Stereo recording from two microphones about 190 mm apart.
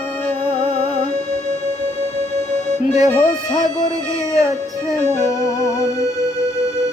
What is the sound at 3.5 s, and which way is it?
Music, 40° left (ahead or behind).